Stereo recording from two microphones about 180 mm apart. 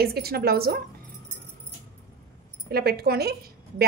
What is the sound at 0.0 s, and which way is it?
Speech, 60° right (ahead or behind).